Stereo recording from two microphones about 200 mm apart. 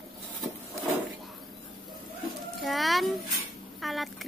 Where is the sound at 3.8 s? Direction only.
Centre (ahead or behind).